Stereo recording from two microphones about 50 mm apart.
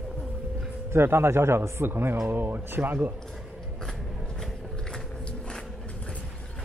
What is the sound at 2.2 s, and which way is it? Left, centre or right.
Speech, right.